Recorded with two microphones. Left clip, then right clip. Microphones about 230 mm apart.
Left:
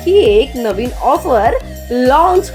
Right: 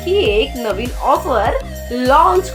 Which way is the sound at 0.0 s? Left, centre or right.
Left.